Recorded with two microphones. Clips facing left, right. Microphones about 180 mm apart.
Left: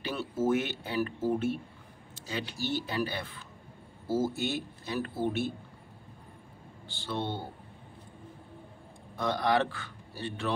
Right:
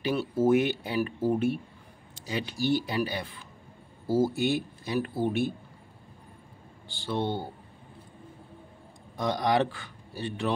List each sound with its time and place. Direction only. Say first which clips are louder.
0.0 s speech: right 5 dB; 15° right (ahead or behind)
6.9 s speech: right 4 dB; 15° right (ahead or behind)
9.1 s a man's voice: right 2 dB; 15° right (ahead or behind)